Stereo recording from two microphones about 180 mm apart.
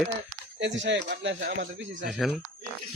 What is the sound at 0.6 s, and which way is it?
Speech, 80° right.